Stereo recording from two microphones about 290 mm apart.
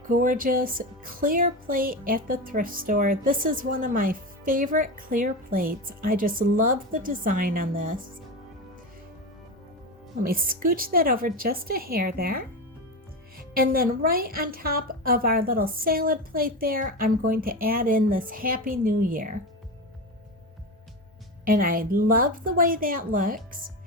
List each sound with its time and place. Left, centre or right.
0.1 s speech: right
10.2 s speech: right
13.5 s speech: right
21.4 s speech: right